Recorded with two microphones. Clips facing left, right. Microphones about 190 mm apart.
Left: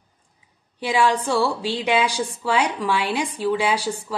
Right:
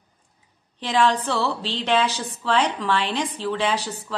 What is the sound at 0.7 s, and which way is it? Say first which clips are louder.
A woman's voice: left 1 dB; 10° left (ahead or behind).